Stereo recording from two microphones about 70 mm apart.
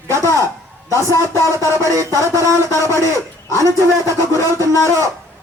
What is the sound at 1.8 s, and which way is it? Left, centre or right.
A man's voice, right.